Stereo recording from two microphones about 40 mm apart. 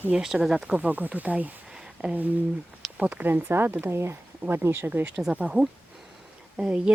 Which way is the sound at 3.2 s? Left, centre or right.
Right.